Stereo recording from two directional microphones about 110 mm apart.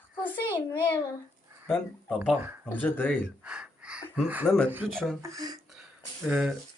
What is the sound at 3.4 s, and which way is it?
Gasp, 10° right (ahead or behind).